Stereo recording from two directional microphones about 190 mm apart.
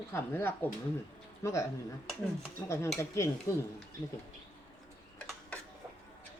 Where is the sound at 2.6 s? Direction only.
15° left (ahead or behind).